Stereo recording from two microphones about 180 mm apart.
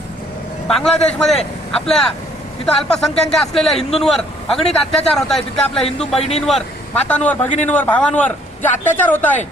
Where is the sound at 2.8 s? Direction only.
Centre (ahead or behind).